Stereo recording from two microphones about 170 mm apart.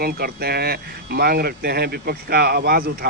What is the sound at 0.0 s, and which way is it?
Speech, 65° right (ahead or behind).